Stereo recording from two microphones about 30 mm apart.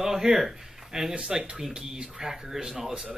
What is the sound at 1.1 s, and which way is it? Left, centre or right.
Speech, right.